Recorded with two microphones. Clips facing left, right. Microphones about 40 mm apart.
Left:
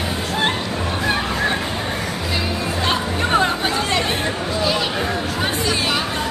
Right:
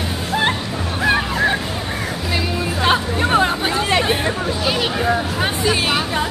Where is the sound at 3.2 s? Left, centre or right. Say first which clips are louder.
Right 1 dB; centre.